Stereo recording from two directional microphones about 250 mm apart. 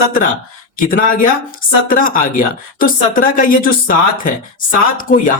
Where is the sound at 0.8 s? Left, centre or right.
Left.